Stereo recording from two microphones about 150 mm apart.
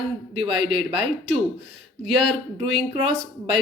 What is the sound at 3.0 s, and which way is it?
Speech, 40° right (ahead or behind).